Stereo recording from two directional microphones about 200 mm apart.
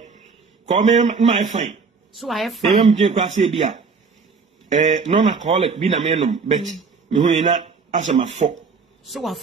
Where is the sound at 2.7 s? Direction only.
35° right (ahead or behind).